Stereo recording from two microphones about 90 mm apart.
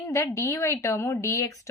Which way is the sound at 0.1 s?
35° left (ahead or behind).